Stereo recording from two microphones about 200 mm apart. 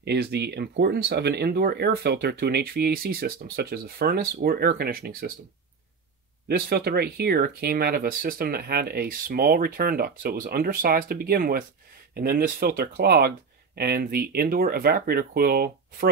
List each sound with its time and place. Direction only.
0.0 s speech: 55° right (ahead or behind)
6.4 s speech: 50° right (ahead or behind)